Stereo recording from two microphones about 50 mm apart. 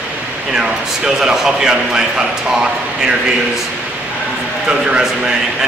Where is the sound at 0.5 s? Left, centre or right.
Centre.